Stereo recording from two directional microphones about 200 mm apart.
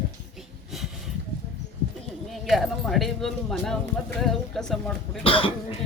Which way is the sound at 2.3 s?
Centre (ahead or behind).